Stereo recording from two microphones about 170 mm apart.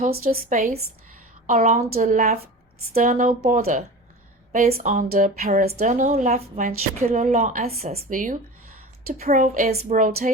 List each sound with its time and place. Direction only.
0.0 s a woman's voice: 55° right (ahead or behind)